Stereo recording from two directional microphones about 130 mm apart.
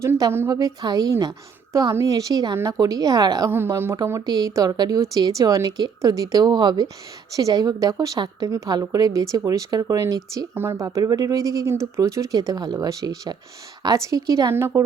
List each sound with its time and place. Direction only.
0.0 s a woman's voice: 20° right (ahead or behind)
3.5 s a woman's voice: 15° right (ahead or behind)
14.5 s a woman's voice: 20° right (ahead or behind)